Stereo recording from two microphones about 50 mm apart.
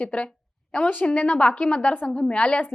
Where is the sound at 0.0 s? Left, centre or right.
Left.